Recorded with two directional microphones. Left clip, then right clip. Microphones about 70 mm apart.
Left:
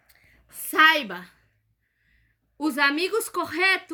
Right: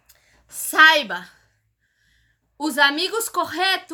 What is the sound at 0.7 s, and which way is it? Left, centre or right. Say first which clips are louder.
Speech: right 5 dB; right.